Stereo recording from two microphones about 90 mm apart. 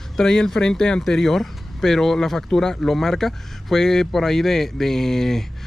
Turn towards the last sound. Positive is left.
turn(degrees=5)  # may be behind; listen again after turning